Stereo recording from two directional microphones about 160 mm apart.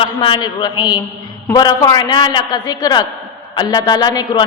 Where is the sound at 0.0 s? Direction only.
30° left (ahead or behind).